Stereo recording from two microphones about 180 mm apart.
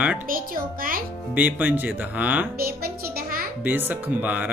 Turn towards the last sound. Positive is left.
turn(degrees=-10)  # may be behind; listen again after turning